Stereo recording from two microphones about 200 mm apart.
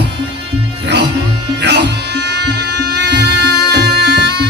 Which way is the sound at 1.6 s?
60° right (ahead or behind).